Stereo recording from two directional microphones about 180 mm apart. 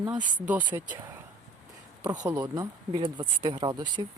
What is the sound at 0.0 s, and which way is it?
Speech, 10° right (ahead or behind).